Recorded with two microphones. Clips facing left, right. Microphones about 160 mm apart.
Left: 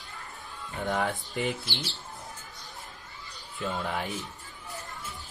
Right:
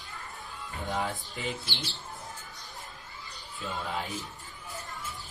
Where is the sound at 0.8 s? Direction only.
55° left (ahead or behind).